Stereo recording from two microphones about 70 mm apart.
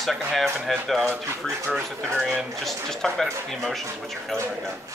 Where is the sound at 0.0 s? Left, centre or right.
Centre.